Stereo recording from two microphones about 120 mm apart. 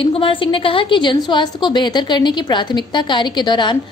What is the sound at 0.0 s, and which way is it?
A woman's voice, 50° left (ahead or behind).